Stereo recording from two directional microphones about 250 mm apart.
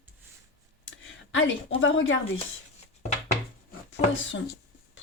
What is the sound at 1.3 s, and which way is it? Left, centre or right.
Speech, left.